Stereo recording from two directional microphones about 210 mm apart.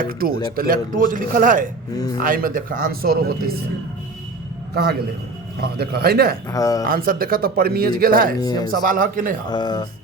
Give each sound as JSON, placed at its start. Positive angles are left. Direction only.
{"t": 0.0, "sound": "a man's voice", "side_deg": -45}
{"t": 4.7, "sound": "speech", "side_deg": -50}
{"t": 6.5, "sound": "speech", "side_deg": 15}
{"t": 6.8, "sound": "speech", "side_deg": -45}
{"t": 8.4, "sound": "speech", "side_deg": 20}
{"t": 8.7, "sound": "a man's voice", "side_deg": -40}
{"t": 9.5, "sound": "speech", "side_deg": 20}